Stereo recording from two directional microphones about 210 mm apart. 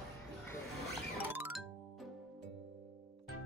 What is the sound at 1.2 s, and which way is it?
Music, 10° right (ahead or behind).